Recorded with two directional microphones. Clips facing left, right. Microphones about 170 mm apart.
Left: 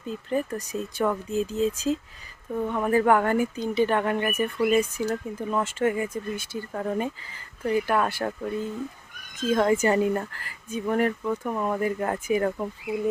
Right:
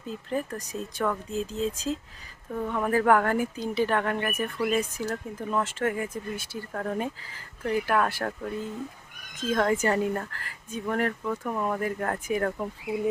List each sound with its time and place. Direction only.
0.1 s speech: centre (ahead or behind)